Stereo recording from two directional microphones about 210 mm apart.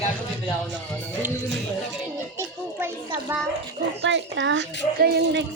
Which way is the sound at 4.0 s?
60° right (ahead or behind).